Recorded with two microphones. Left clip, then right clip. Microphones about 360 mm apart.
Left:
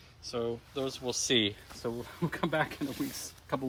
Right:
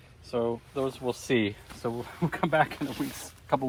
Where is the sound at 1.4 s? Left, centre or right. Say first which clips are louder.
Even; centre.